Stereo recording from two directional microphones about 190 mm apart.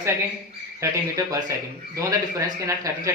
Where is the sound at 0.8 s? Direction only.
15° right (ahead or behind).